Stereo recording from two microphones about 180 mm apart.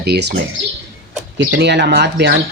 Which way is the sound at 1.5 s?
70° right (ahead or behind).